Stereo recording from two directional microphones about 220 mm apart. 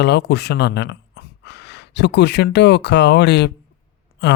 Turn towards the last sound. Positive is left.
turn(degrees=50)  # may be behind; listen again after turning